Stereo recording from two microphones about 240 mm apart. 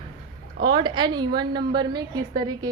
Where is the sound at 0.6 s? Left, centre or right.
Centre.